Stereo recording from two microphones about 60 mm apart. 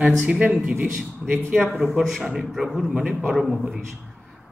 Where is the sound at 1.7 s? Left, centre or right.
Centre.